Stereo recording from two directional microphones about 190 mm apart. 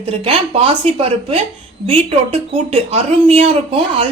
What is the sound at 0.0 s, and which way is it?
Speech, 30° right (ahead or behind).